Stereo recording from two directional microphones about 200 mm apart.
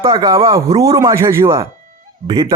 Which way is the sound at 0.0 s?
20° right (ahead or behind).